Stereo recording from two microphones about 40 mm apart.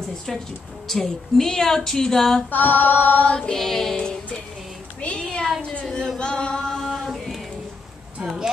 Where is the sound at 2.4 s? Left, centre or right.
Left.